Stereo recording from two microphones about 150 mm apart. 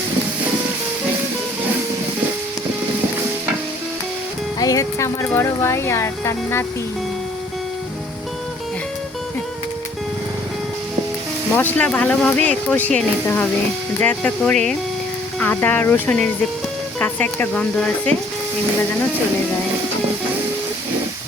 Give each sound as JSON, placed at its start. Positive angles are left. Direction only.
{"t": 4.6, "sound": "speech", "side_deg": 25}
{"t": 11.5, "sound": "speech", "side_deg": 10}